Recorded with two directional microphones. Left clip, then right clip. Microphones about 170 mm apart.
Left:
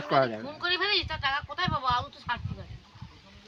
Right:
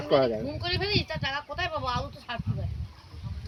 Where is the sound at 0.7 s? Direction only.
15° left (ahead or behind).